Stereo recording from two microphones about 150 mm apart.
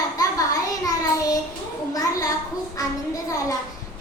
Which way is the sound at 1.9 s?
25° left (ahead or behind).